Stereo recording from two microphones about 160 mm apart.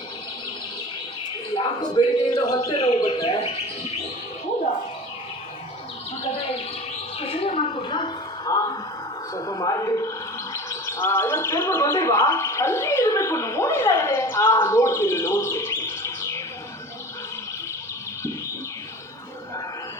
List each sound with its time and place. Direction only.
1.5 s a man's voice: 30° left (ahead or behind)
7.2 s a woman's voice: 35° left (ahead or behind); by 16.4 s 20° left (ahead or behind)